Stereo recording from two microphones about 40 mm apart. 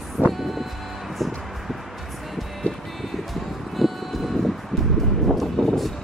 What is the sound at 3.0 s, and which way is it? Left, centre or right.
Music, centre.